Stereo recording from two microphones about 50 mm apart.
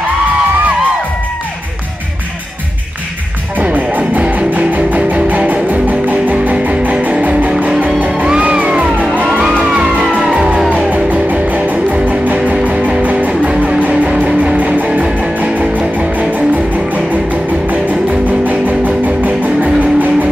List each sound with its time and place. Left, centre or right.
3.7 s music: right
15.1 s music: right